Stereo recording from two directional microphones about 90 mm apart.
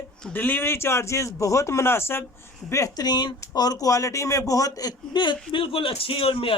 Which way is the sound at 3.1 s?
55° left (ahead or behind).